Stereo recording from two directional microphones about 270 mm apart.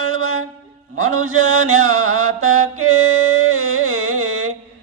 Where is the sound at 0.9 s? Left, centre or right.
Right.